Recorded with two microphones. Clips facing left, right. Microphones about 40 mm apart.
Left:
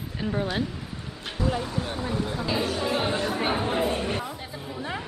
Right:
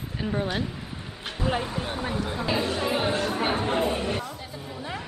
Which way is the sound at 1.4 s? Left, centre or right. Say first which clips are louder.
Even; right.